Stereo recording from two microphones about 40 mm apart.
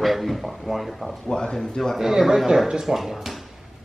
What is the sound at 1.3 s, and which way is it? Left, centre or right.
Speech, centre.